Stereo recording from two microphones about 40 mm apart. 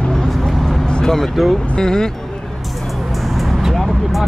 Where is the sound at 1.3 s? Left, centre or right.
Centre.